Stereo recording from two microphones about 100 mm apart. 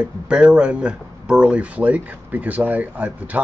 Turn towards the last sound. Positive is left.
turn(degrees=-15)  # may be behind; listen again after turning